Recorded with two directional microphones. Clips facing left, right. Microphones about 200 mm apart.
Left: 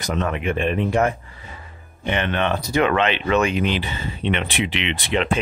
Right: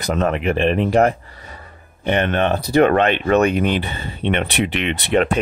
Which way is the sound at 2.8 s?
50° right (ahead or behind).